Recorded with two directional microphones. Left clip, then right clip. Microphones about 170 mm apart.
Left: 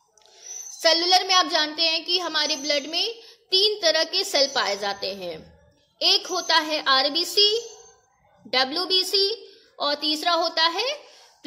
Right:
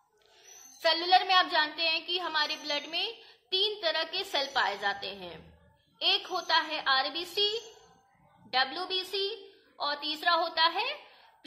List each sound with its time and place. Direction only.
0.8 s a child's voice: 45° left (ahead or behind)